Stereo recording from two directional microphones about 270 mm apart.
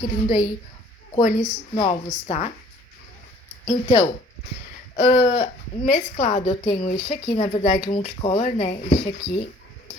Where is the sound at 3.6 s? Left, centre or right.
Left.